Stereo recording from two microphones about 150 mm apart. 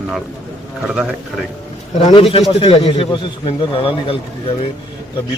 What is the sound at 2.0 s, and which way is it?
A man's voice, 40° left (ahead or behind).